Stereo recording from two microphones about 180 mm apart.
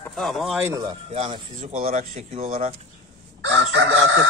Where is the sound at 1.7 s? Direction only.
45° right (ahead or behind).